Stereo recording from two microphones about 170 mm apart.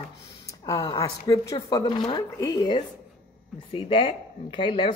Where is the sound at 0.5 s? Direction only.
20° left (ahead or behind).